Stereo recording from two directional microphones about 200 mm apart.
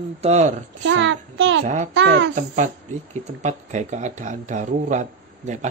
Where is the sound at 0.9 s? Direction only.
65° right (ahead or behind).